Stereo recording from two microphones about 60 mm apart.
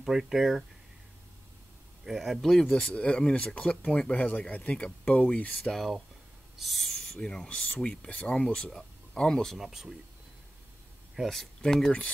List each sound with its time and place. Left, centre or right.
0.0 s speech: centre
2.0 s speech: centre
2.9 s speech: centre
5.7 s speech: centre
9.6 s speech: centre
11.2 s speech: centre